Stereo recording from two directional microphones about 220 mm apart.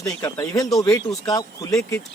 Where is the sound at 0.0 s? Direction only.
15° left (ahead or behind).